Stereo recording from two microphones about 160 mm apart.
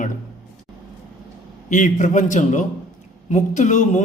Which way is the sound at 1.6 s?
50° left (ahead or behind).